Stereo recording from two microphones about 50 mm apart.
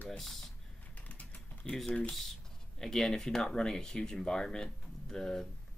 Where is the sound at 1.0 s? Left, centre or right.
Left.